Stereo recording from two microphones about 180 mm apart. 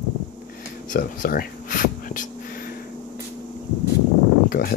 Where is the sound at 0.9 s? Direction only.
50° left (ahead or behind).